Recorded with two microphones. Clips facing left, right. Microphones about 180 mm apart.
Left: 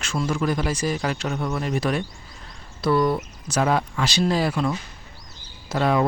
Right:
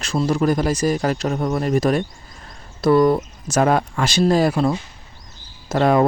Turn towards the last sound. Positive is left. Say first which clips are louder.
# right 5 dB
turn(degrees=-45)  # may be behind; listen again after turning